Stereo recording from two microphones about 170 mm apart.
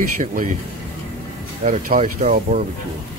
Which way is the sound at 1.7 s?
55° right (ahead or behind).